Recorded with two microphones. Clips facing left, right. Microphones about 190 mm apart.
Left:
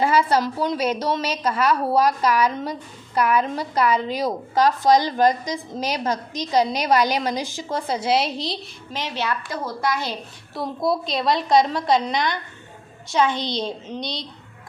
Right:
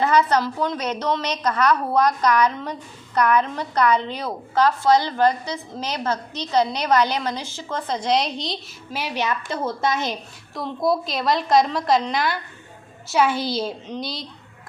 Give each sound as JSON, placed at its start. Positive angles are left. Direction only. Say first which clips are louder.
{"t": 0.0, "sound": "a woman's voice", "louder": "even", "side_deg": 10}
{"t": 9.0, "sound": "a woman's voice", "louder": "right 1 dB", "side_deg": -15}
{"t": 10.5, "sound": "a woman's voice", "louder": "right 1 dB", "side_deg": 5}